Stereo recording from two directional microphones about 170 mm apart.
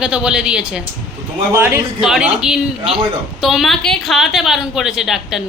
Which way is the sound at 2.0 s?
5° right (ahead or behind).